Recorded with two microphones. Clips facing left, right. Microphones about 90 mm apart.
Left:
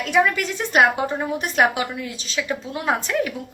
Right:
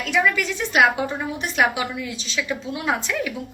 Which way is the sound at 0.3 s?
40° left (ahead or behind).